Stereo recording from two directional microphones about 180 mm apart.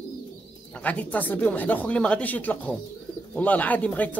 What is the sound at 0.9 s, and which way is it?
Speech, 10° left (ahead or behind).